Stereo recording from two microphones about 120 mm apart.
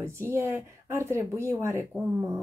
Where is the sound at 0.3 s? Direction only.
25° right (ahead or behind).